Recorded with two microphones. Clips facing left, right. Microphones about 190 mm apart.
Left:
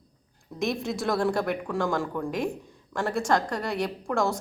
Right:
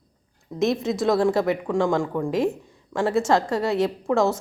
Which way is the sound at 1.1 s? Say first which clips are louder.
Right 5 dB; 20° right (ahead or behind).